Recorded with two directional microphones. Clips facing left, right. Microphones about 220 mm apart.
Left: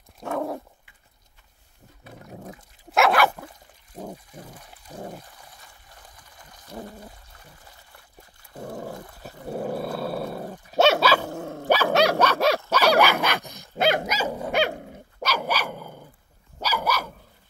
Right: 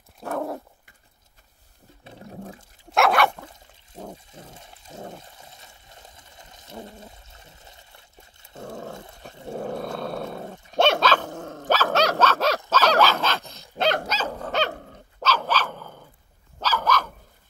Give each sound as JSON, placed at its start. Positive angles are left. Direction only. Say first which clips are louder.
{"t": 0.2, "sound": "dog", "louder": "left 1 dB", "side_deg": 0}
{"t": 2.9, "sound": "dog", "louder": "even", "side_deg": 0}
{"t": 4.3, "sound": "a sound", "louder": "left 2 dB", "side_deg": -25}
{"t": 5.2, "sound": "water", "louder": "right 2 dB", "side_deg": -25}
{"t": 8.6, "sound": "dog", "louder": "left 1 dB", "side_deg": 10}
{"t": 8.9, "sound": "dog", "louder": "left 1 dB", "side_deg": -25}
{"t": 9.5, "sound": "roar", "louder": "left 1 dB", "side_deg": 5}
{"t": 10.7, "sound": "dog", "louder": "left 1 dB", "side_deg": 5}